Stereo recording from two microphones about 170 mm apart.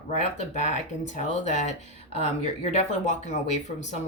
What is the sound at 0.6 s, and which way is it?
Speech, 45° left (ahead or behind).